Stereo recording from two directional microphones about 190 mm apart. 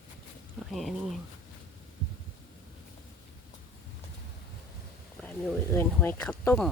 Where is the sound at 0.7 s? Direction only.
Centre (ahead or behind).